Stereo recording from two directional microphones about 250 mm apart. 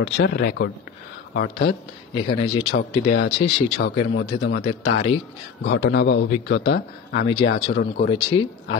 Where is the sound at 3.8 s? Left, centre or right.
Left.